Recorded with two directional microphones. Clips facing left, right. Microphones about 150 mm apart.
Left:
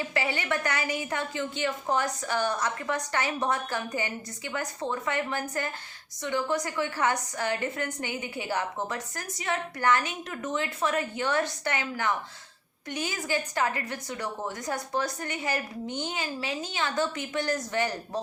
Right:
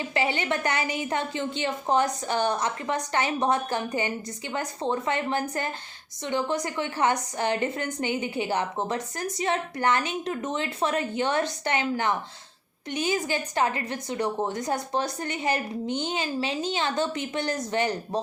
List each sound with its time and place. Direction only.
0.1 s a woman's voice: 20° right (ahead or behind)